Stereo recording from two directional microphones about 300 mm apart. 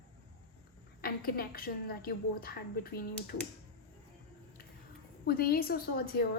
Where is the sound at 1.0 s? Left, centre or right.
Left.